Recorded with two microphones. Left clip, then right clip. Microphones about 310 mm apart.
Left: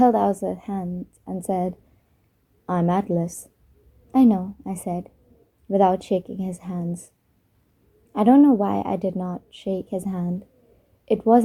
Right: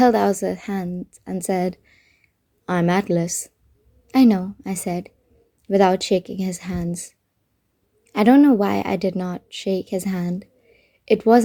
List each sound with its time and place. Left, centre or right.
0.0 s a woman's voice: right
8.1 s a woman's voice: right